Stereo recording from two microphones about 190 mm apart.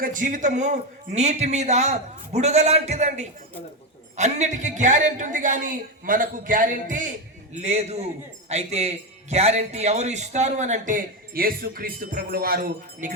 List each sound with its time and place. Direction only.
0.0 s a man's voice: 45° right (ahead or behind)